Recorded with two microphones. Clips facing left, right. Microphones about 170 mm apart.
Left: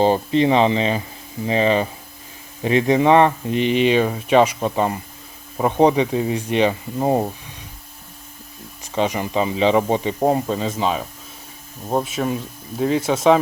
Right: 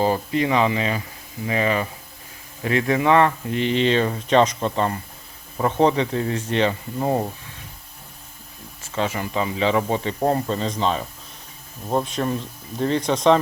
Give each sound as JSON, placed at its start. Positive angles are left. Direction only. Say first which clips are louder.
{"t": 0.0, "sound": "speech", "louder": "left 5 dB", "side_deg": 25}
{"t": 8.8, "sound": "speech", "louder": "left 4 dB", "side_deg": 15}